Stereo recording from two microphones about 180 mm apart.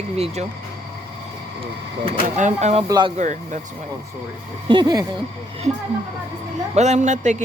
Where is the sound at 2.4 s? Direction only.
40° right (ahead or behind).